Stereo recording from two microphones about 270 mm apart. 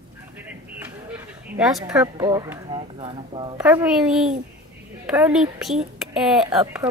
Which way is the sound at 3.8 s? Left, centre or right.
Centre.